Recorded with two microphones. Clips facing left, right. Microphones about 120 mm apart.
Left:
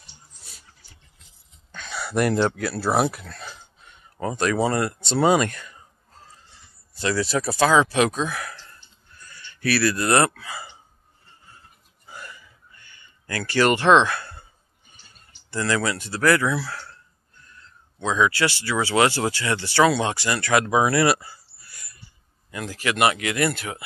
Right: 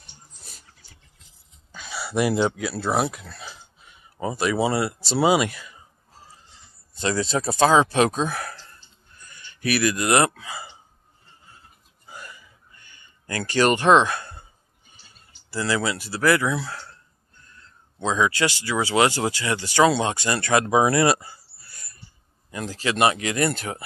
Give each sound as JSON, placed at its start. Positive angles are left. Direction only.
{"t": 1.7, "sound": "speech", "side_deg": -5}
{"t": 7.0, "sound": "speech", "side_deg": -25}
{"t": 9.2, "sound": "speech", "side_deg": -20}
{"t": 12.1, "sound": "chuckle", "side_deg": -20}
{"t": 13.3, "sound": "speech", "side_deg": -20}
{"t": 15.6, "sound": "speech", "side_deg": -20}
{"t": 18.0, "sound": "speech", "side_deg": -25}